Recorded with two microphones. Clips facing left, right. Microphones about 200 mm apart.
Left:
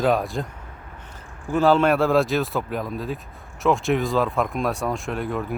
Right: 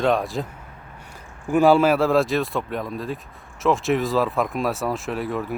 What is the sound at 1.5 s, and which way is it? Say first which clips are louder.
Speech: right 2 dB; 15° right (ahead or behind).